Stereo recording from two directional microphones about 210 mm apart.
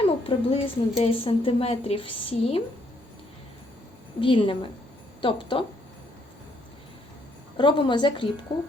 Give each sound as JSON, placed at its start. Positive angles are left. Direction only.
{"t": 0.3, "sound": "a woman's voice", "side_deg": 30}
{"t": 4.2, "sound": "a woman's voice", "side_deg": 25}
{"t": 7.5, "sound": "a woman's voice", "side_deg": 20}